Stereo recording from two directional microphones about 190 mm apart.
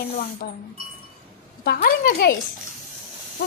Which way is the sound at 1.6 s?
55° left (ahead or behind).